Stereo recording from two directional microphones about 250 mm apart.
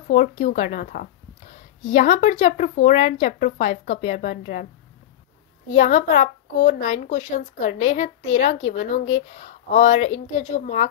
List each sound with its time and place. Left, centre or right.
0.1 s a woman's voice: left
5.8 s a woman's voice: left